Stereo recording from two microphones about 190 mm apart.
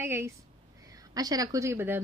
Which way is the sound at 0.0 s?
15° right (ahead or behind).